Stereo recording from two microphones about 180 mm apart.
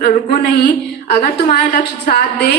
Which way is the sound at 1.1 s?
55° left (ahead or behind).